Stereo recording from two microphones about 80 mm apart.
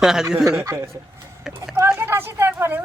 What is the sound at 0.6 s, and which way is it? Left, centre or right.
Speech, right.